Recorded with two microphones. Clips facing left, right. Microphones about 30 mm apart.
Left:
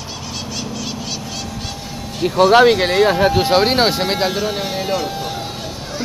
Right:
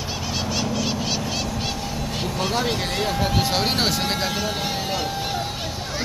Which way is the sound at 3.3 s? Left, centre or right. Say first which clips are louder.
Left 8 dB; left.